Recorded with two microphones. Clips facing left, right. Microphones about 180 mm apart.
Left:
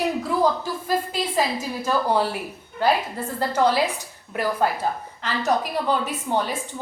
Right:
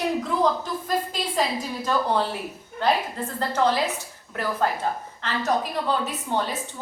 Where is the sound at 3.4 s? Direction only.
10° left (ahead or behind).